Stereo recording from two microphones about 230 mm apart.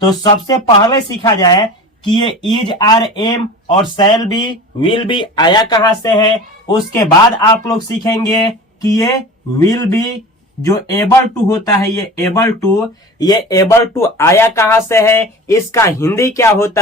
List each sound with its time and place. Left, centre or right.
0.0 s speech: centre